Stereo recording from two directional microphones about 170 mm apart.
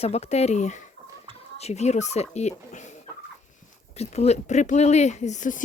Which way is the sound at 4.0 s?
40° left (ahead or behind).